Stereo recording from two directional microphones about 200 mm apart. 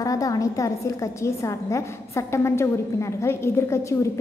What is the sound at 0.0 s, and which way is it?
A woman's voice, 15° left (ahead or behind).